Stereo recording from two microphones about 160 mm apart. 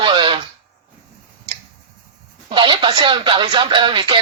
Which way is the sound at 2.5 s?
30° right (ahead or behind).